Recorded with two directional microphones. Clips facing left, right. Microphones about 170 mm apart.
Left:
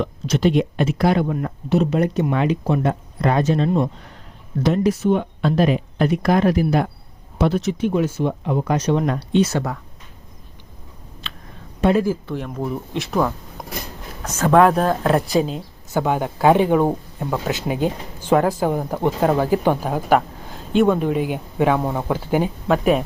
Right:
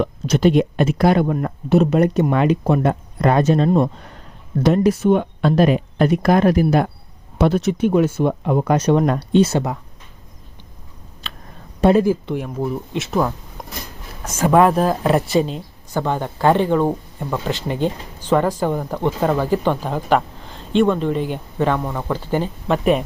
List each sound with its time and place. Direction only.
0.0 s speech: 50° right (ahead or behind)
9.4 s speech: 25° right (ahead or behind)
11.3 s a sound: 40° right (ahead or behind)
11.8 s speech: 30° right (ahead or behind)
12.0 s speech: 15° right (ahead or behind); by 23.0 s centre (ahead or behind)